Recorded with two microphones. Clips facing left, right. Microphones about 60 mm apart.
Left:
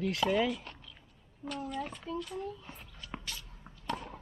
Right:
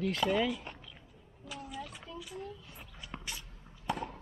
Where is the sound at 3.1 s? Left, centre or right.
Centre.